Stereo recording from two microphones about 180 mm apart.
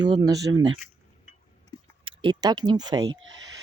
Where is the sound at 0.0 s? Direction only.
25° right (ahead or behind).